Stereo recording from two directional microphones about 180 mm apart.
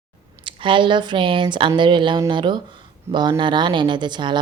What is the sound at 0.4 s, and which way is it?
Speech, 25° right (ahead or behind).